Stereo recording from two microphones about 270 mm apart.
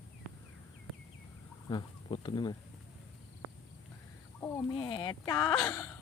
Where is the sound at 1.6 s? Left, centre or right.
Centre.